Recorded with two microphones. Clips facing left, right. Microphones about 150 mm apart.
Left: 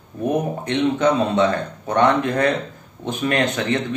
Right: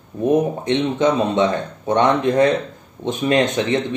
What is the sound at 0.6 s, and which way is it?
Speech, 20° right (ahead or behind).